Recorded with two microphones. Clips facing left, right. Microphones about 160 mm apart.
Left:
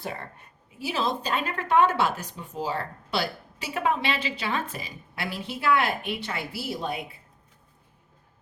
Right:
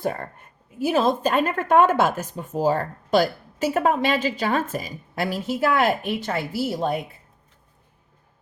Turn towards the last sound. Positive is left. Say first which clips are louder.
# right 7 dB
turn(degrees=-45)  # may be behind; listen again after turning